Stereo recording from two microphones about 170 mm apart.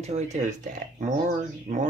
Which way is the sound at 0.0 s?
45° right (ahead or behind).